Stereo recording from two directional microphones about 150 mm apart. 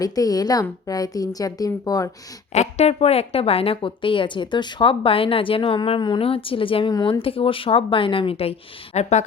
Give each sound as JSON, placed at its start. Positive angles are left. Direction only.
{"t": 0.0, "sound": "a woman's voice", "side_deg": 25}
{"t": 2.5, "sound": "a woman's voice", "side_deg": 45}